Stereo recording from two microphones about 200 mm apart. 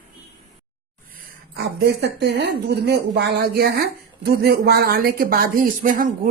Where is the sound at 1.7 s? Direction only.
55° right (ahead or behind).